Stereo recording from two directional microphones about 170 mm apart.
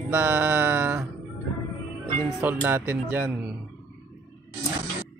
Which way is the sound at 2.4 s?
10° right (ahead or behind).